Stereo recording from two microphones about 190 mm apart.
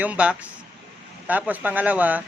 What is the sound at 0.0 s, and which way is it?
A man's voice, 5° right (ahead or behind).